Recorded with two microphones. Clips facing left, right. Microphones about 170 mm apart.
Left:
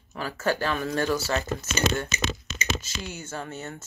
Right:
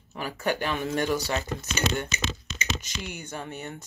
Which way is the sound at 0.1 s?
15° right (ahead or behind).